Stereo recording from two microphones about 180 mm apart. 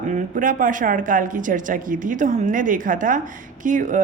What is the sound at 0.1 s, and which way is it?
A woman's voice, 50° right (ahead or behind).